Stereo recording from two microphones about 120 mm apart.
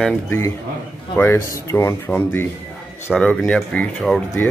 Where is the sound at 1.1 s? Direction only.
15° left (ahead or behind).